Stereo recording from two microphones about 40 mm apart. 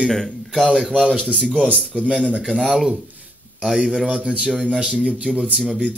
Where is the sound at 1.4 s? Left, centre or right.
Right.